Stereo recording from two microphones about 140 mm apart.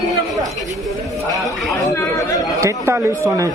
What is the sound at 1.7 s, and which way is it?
Speech, 25° left (ahead or behind).